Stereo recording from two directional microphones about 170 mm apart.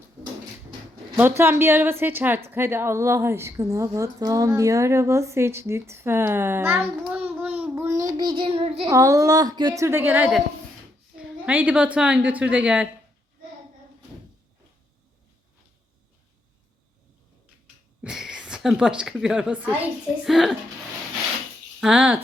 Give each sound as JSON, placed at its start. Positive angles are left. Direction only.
{"t": 1.1, "sound": "a woman's voice", "side_deg": -10}
{"t": 7.0, "sound": "child singing", "side_deg": -10}
{"t": 8.9, "sound": "a woman's voice", "side_deg": -20}
{"t": 9.8, "sound": "a woman's voice", "side_deg": -10}
{"t": 11.4, "sound": "a woman's voice", "side_deg": -10}
{"t": 18.0, "sound": "speech", "side_deg": -5}
{"t": 21.8, "sound": "speech", "side_deg": -5}